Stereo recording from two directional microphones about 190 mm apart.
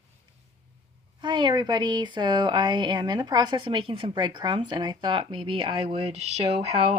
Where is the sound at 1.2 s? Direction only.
25° right (ahead or behind).